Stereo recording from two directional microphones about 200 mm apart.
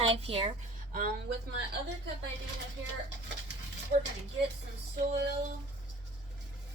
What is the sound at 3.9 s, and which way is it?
Speech, 40° right (ahead or behind).